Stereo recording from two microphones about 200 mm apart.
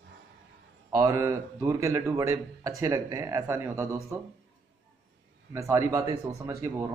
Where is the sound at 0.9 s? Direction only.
15° right (ahead or behind).